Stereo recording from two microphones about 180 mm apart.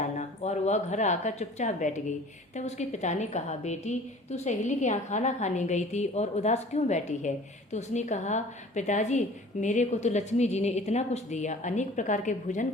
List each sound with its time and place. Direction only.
0.0 s a woman's voice: 40° left (ahead or behind)